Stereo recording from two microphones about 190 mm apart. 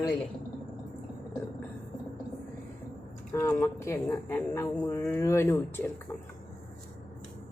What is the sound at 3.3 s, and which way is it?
Speech, 15° left (ahead or behind).